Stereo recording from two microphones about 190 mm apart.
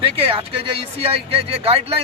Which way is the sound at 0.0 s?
30° right (ahead or behind).